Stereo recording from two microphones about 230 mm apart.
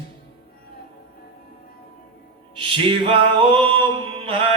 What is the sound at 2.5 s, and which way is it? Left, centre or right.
A man's voice, right.